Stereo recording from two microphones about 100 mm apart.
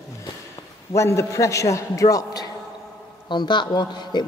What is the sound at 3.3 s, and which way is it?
Speech, 50° left (ahead or behind).